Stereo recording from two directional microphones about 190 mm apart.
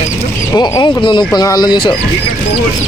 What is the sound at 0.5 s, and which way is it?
Speech, 20° left (ahead or behind).